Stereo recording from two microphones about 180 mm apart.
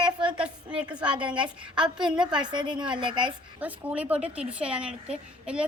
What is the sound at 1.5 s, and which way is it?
Speech, 5° right (ahead or behind).